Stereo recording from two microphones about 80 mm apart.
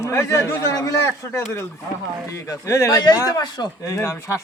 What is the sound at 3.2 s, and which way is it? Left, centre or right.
Speech, left.